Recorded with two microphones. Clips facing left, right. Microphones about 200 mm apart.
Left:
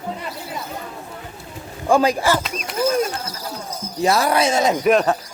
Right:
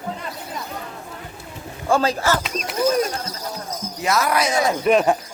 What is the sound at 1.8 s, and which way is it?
Speech, 15° left (ahead or behind).